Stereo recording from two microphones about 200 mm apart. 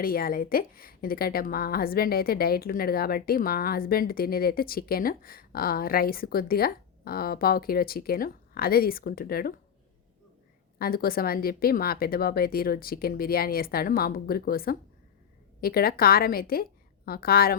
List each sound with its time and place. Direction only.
0.0 s a woman's voice: 45° left (ahead or behind)
10.8 s a woman's voice: 50° left (ahead or behind)